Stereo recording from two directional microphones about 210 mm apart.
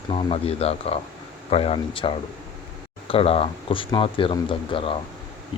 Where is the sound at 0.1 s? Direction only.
25° left (ahead or behind).